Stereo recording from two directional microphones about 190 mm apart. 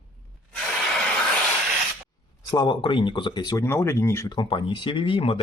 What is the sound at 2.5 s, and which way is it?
Speech, 25° left (ahead or behind).